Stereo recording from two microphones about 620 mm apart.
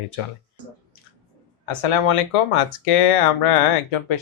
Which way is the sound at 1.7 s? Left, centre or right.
Left.